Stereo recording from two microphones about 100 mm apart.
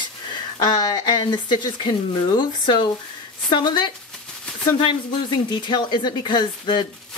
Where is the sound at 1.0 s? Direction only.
50° left (ahead or behind).